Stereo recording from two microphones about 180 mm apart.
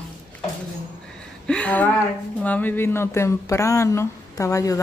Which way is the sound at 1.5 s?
5° left (ahead or behind).